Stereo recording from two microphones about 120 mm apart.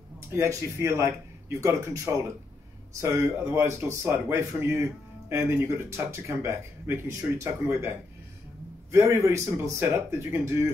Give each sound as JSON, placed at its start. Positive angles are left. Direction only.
{"t": 0.3, "sound": "speech", "side_deg": -20}
{"t": 8.9, "sound": "speech", "side_deg": -25}